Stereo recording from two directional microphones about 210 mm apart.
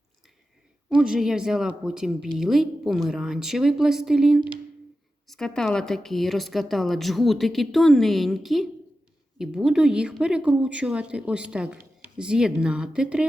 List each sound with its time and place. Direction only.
0.9 s a woman's voice: 5° right (ahead or behind)